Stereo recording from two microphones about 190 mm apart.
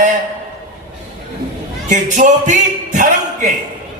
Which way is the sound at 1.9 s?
40° right (ahead or behind).